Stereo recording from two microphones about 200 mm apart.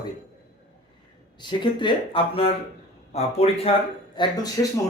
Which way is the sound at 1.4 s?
25° left (ahead or behind).